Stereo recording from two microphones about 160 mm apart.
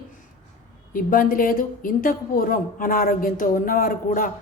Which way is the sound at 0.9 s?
60° left (ahead or behind).